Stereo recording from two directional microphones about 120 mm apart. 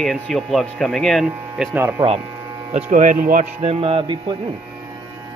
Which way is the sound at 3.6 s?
50° right (ahead or behind).